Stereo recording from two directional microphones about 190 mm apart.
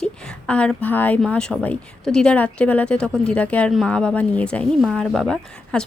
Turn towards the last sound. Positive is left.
turn(degrees=5)  # may be behind; listen again after turning